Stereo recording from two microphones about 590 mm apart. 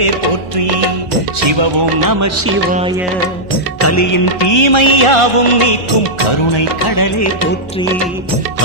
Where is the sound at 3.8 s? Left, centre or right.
Left.